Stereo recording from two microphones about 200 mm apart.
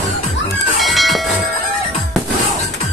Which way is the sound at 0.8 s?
Centre (ahead or behind).